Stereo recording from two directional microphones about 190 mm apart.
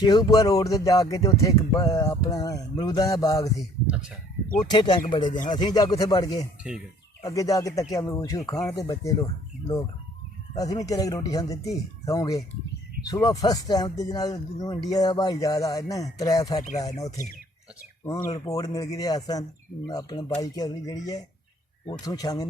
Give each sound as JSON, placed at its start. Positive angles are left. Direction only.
{"t": 0.0, "sound": "speech", "side_deg": 20}
{"t": 3.6, "sound": "speech", "side_deg": -5}
{"t": 4.7, "sound": "speech", "side_deg": 25}
{"t": 6.6, "sound": "speech", "side_deg": -5}
{"t": 7.2, "sound": "speech", "side_deg": 20}
{"t": 18.0, "sound": "speech", "side_deg": 20}
{"t": 22.0, "sound": "speech", "side_deg": 20}